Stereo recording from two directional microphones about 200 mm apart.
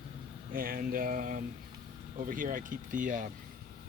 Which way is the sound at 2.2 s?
40° right (ahead or behind).